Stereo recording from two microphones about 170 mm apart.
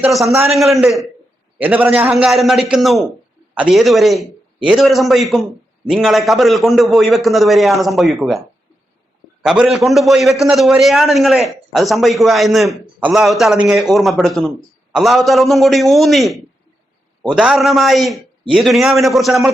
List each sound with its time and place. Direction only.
0.0 s a man's voice: centre (ahead or behind)
9.4 s a man's voice: 5° right (ahead or behind)